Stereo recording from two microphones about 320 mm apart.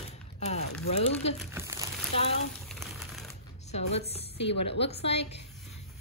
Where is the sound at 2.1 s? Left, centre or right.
Centre.